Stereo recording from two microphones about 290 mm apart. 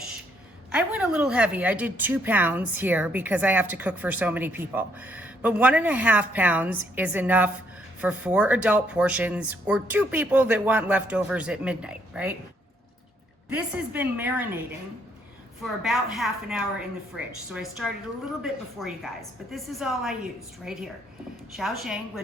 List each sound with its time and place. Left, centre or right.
0.7 s a woman's voice: centre
13.5 s a woman's voice: centre
15.8 s a woman's voice: centre